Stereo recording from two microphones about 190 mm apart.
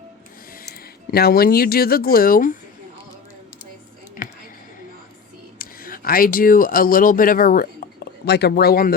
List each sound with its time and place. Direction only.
1.1 s speech: 55° left (ahead or behind)
4.2 s a sound: 45° left (ahead or behind)
5.5 s speech: 50° left (ahead or behind)